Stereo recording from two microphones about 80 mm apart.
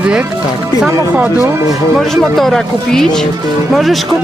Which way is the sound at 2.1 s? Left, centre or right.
Centre.